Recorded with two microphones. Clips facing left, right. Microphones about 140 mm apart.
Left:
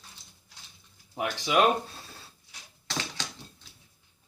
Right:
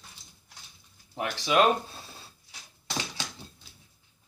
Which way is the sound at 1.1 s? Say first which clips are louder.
Right 1 dB; 10° left (ahead or behind).